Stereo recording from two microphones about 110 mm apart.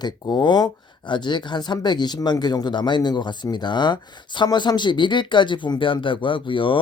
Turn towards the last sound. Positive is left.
turn(degrees=50)  # may be behind; listen again after turning